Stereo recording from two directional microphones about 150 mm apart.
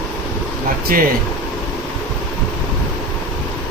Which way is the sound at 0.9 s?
70° right (ahead or behind).